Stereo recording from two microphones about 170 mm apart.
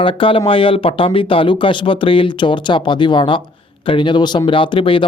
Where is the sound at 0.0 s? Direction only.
30° left (ahead or behind).